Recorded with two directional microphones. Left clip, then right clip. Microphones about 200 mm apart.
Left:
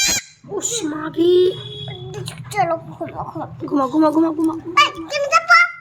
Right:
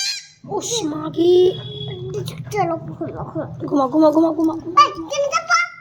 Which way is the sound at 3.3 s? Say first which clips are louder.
Right 2 dB; 10° left (ahead or behind).